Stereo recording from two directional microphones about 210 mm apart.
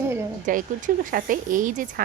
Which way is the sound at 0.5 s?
40° right (ahead or behind).